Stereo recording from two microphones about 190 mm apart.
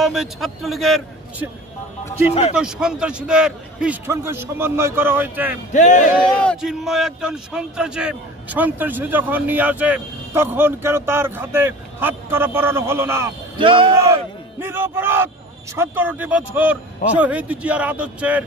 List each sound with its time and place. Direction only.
0.0 s a man's voice: centre (ahead or behind)
2.5 s speech: 5° right (ahead or behind)
5.7 s speech: 40° left (ahead or behind)
6.4 s speech: centre (ahead or behind)
13.6 s speech: 25° right (ahead or behind)
14.6 s speech: 10° right (ahead or behind)